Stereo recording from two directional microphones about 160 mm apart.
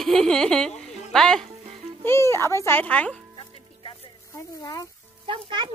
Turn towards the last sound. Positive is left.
turn(degrees=-30)  # may be behind; listen again after turning